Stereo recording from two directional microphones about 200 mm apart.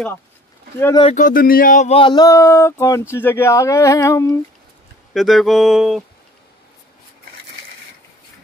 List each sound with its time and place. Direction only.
0.7 s speech: 10° left (ahead or behind)
1.0 s speech: 40° left (ahead or behind); by 4.4 s 15° left (ahead or behind)
5.1 s a sound: centre (ahead or behind)